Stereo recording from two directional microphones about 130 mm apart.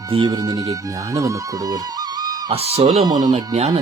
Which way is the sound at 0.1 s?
35° right (ahead or behind).